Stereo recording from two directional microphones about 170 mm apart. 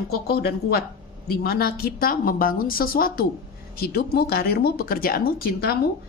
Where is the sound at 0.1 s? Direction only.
65° left (ahead or behind).